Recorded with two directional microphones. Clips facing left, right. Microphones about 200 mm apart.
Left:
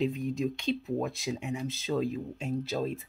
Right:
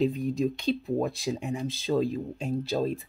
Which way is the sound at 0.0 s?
35° right (ahead or behind).